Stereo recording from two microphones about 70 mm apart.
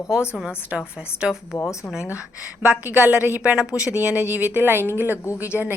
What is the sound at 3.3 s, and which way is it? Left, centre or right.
Speech, centre.